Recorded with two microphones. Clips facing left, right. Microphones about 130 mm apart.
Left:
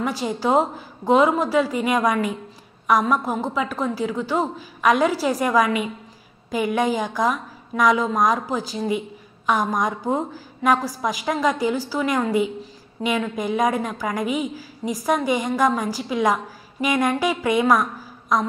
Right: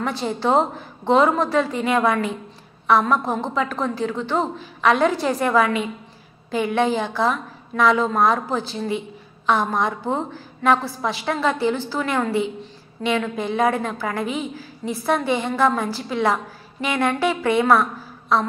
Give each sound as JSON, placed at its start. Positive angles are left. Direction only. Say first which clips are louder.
{"t": 0.0, "sound": "a woman's voice", "louder": "even", "side_deg": 10}